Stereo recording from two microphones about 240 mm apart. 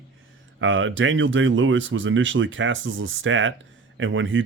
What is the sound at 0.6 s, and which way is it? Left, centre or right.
Speech, right.